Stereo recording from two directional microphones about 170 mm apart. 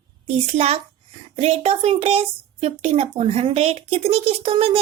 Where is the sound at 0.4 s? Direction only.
40° right (ahead or behind).